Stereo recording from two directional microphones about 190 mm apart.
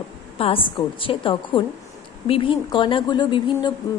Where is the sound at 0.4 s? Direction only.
30° left (ahead or behind).